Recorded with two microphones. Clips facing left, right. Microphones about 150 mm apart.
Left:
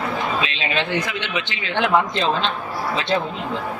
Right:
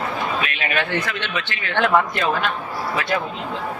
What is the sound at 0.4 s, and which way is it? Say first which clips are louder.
A man's voice: even; 20° left (ahead or behind).